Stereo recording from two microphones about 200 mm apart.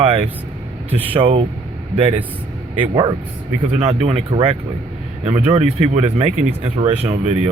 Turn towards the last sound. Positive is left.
turn(degrees=-40)  # may be behind; listen again after turning